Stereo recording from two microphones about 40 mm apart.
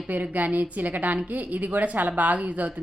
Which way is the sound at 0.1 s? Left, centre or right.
Right.